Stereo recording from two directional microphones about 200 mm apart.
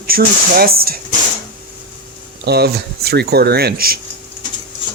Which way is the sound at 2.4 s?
55° right (ahead or behind).